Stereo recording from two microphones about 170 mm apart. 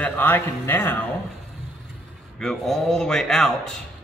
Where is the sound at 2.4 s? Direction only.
Centre (ahead or behind).